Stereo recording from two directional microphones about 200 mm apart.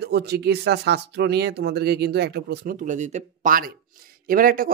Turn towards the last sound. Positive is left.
turn(degrees=-45)  # may be behind; listen again after turning